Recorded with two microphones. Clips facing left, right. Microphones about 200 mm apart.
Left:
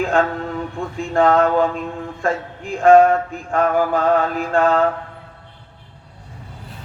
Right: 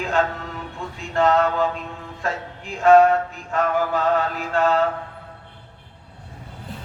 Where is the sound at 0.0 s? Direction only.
50° left (ahead or behind).